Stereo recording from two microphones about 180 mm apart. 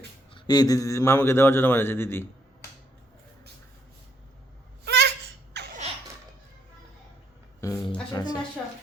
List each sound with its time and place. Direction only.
0.3 s speech: 25° left (ahead or behind)
4.9 s a sound: 70° right (ahead or behind)
5.5 s laughter: 70° right (ahead or behind)
7.6 s music: 15° left (ahead or behind)